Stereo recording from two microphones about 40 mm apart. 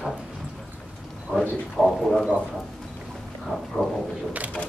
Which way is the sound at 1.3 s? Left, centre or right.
Centre.